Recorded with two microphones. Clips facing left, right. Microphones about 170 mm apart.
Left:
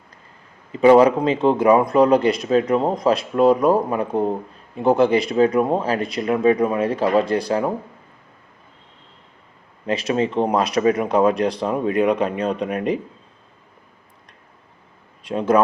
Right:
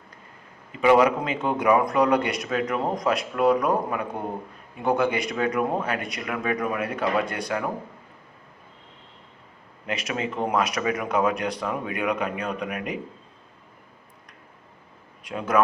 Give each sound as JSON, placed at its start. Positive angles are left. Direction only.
{"t": 0.7, "sound": "a man's voice", "side_deg": 35}
{"t": 9.8, "sound": "speech", "side_deg": 35}
{"t": 15.2, "sound": "speech", "side_deg": 30}